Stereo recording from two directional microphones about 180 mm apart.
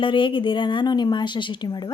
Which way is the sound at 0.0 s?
30° left (ahead or behind).